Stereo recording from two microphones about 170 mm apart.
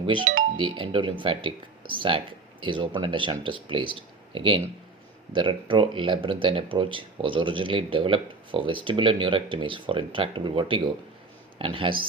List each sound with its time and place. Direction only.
0.0 s speech: 30° right (ahead or behind)